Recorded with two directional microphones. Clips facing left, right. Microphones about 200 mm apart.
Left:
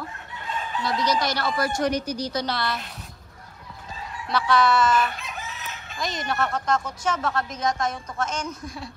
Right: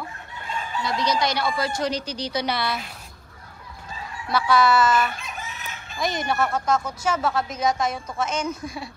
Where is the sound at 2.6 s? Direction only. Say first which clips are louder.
Right 1 dB; 5° right (ahead or behind).